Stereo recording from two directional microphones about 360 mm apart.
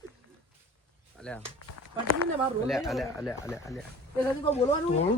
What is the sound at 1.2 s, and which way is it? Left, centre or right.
Speech, centre.